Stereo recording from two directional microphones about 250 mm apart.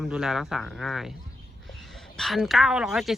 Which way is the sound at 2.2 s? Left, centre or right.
Centre.